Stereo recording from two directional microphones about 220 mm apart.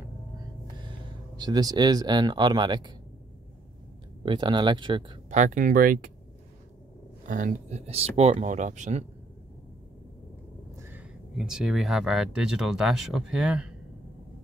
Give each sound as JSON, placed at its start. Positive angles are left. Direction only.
{"t": 0.8, "sound": "speech", "side_deg": -20}
{"t": 4.2, "sound": "speech", "side_deg": -20}
{"t": 5.3, "sound": "speech", "side_deg": -35}
{"t": 7.2, "sound": "speech", "side_deg": -35}
{"t": 10.8, "sound": "speech", "side_deg": -10}